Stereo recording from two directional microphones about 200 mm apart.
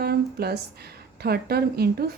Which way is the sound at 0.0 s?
50° right (ahead or behind).